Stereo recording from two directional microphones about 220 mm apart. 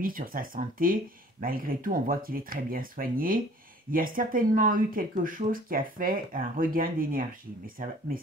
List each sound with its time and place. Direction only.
0.0 s speech: 40° right (ahead or behind)